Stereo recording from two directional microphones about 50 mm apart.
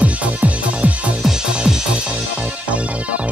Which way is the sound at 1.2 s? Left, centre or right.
Centre.